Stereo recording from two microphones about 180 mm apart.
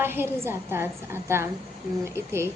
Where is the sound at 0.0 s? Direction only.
10° right (ahead or behind).